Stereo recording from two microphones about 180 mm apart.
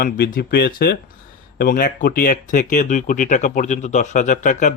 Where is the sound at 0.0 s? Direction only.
55° left (ahead or behind).